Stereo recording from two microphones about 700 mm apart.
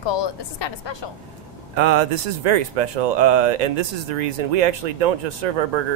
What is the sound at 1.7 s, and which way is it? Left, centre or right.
Speech, right.